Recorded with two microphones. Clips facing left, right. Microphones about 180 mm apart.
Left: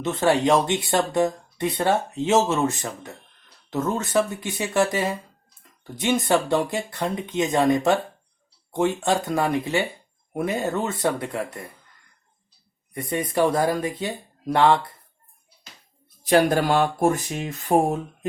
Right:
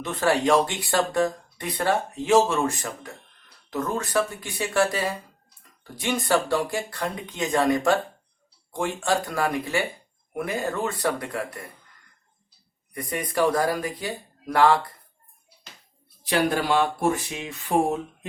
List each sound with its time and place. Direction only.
0.0 s speech: 25° left (ahead or behind)
12.9 s speech: 25° left (ahead or behind)
16.2 s speech: 45° left (ahead or behind)